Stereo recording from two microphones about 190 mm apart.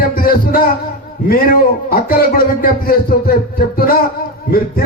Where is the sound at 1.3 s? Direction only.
50° left (ahead or behind).